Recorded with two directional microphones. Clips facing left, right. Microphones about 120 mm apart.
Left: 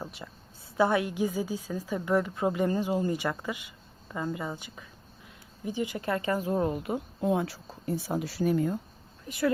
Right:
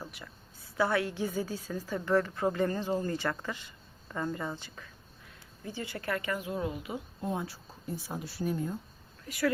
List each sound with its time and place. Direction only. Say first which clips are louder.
0.0 s a sound: left 4 dB; 25° left (ahead or behind)
0.8 s a woman's voice: left 4 dB; 20° left (ahead or behind); by 7.0 s 50° left (ahead or behind)
7.2 s speech: left 8 dB; 90° left
9.2 s speech: left 2 dB; 25° left (ahead or behind)